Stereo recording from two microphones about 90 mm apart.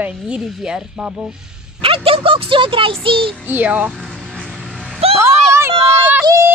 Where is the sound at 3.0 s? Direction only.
80° right.